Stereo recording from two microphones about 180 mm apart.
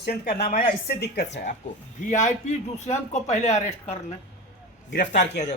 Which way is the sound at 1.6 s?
40° left (ahead or behind).